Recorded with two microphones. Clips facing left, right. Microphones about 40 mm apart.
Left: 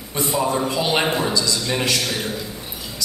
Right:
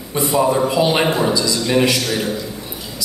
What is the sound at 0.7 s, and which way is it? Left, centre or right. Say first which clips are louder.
A man's voice: right 4 dB; centre.